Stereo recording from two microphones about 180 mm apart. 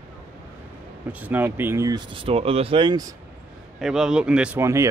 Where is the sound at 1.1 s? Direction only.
10° right (ahead or behind); by 3.0 s 25° right (ahead or behind).